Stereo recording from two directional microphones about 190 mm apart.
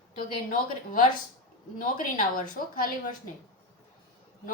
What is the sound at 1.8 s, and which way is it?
Speech, 45° left (ahead or behind).